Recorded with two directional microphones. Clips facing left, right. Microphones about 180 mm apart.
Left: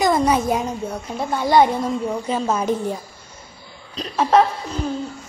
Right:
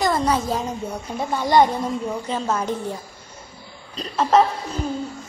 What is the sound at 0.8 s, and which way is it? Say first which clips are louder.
A woman's voice: left 1 dB; 5° left (ahead or behind).